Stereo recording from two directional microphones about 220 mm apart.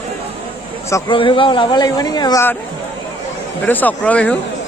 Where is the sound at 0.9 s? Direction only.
15° left (ahead or behind).